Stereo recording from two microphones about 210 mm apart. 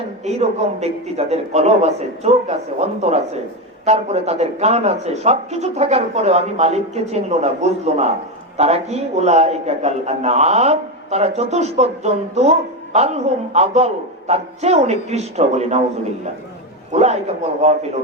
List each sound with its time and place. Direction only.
0.3 s a man's voice: 30° right (ahead or behind)
16.9 s a man's voice: 30° right (ahead or behind)